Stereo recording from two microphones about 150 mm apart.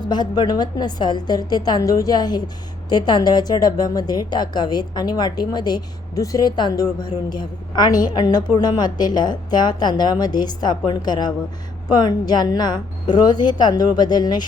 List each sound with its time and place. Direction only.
0.1 s a woman's voice: 30° left (ahead or behind)